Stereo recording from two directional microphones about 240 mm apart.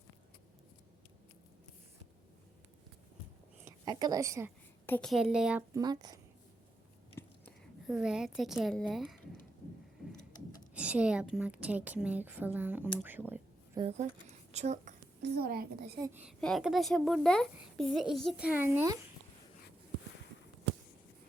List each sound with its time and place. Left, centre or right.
3.7 s a woman's voice: centre
4.9 s a child's voice: centre
7.2 s a sound: centre
10.8 s a woman's voice: centre
13.8 s speech: right
15.2 s a child's voice: right
16.0 s a woman's voice: centre
16.4 s a child's voice: centre